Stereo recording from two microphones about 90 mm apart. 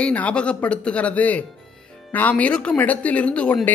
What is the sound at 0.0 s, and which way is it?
Speech, 15° left (ahead or behind).